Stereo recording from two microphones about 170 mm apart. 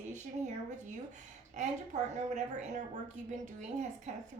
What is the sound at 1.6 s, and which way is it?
A woman's voice, 45° right (ahead or behind).